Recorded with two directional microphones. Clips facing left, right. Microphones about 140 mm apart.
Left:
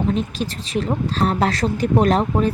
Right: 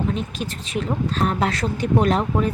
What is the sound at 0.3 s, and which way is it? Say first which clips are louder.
Speech: left 3 dB; 35° left (ahead or behind).